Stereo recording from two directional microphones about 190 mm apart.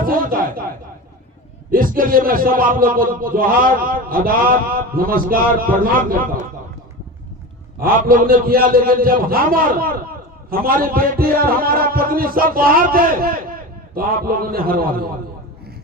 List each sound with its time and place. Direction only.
0.0 s a sound: 50° right (ahead or behind)
1.7 s a man's voice: 45° right (ahead or behind)
7.8 s a man's voice: 50° right (ahead or behind)